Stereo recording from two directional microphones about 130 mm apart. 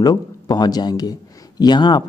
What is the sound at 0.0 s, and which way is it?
A man's voice, 30° left (ahead or behind).